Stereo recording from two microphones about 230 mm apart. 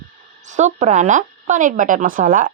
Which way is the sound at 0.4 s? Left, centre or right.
Right.